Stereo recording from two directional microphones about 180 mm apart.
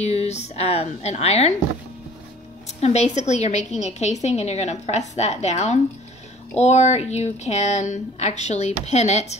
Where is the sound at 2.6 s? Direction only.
40° left (ahead or behind).